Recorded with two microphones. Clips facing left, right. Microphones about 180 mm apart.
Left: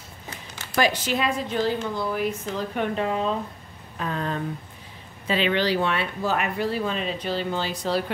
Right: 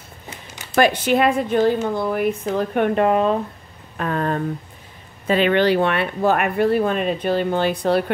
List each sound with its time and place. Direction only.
0.7 s speech: 55° right (ahead or behind)